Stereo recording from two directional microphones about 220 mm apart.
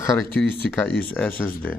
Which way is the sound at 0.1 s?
5° left (ahead or behind).